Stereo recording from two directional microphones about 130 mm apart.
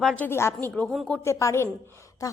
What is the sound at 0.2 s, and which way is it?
Speech, 20° left (ahead or behind).